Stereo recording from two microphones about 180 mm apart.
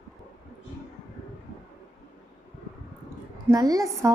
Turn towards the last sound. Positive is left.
turn(degrees=-20)  # may be behind; listen again after turning